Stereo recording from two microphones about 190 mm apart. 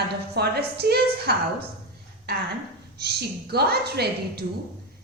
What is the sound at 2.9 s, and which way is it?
A woman's voice, 60° right (ahead or behind).